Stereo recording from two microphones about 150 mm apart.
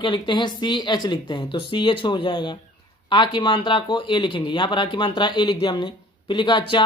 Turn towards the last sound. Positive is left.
turn(degrees=30)  # may be behind; listen again after turning